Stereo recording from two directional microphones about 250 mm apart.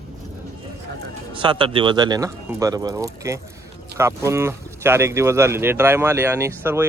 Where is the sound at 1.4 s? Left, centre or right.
Centre.